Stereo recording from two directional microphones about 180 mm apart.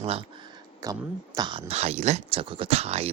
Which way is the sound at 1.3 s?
25° right (ahead or behind).